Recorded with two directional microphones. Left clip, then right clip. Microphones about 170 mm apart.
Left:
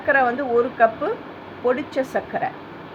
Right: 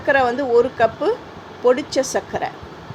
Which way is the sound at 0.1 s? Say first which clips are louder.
Right 1 dB; 30° right (ahead or behind).